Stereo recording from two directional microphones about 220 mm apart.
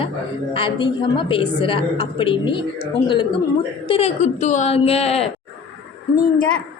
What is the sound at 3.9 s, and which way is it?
A woman's voice, 30° left (ahead or behind).